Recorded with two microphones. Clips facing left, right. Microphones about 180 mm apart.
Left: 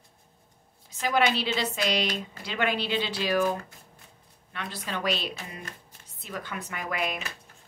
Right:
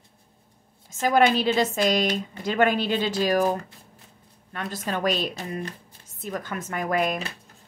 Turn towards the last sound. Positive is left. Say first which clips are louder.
# right 7 dB
turn(degrees=-40)  # may be behind; listen again after turning